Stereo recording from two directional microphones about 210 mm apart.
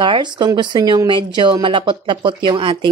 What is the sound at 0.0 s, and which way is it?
Speech, 20° right (ahead or behind).